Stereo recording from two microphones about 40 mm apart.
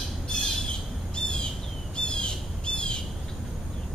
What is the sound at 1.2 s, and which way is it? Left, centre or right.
Bird, centre.